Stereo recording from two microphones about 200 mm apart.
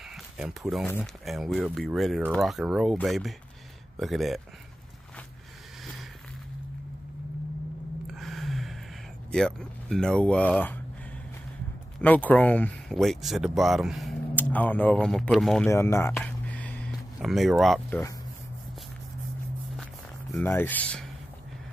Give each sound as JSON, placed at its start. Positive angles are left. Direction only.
{"t": 0.1, "sound": "speech", "side_deg": 0}
{"t": 8.1, "sound": "gasp", "side_deg": 0}
{"t": 9.3, "sound": "speech", "side_deg": 5}
{"t": 12.0, "sound": "speech", "side_deg": 10}
{"t": 15.6, "sound": "a sound", "side_deg": 15}
{"t": 19.8, "sound": "walk", "side_deg": 5}